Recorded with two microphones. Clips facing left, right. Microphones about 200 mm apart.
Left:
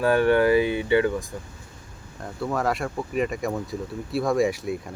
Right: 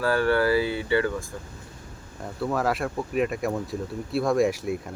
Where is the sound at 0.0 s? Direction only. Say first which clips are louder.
Left 3 dB; 20° left (ahead or behind).